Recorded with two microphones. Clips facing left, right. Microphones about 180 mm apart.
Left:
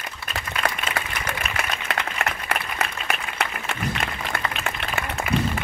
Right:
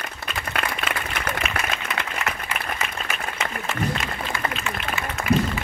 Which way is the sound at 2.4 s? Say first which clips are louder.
Left 2 dB; 65° left (ahead or behind).